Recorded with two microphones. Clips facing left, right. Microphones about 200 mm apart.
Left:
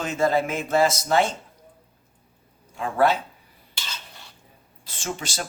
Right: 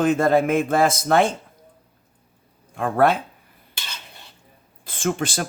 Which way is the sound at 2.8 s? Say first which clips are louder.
Right 3 dB; 55° right (ahead or behind).